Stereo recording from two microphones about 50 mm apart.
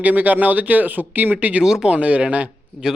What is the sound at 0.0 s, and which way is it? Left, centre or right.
Speech, right.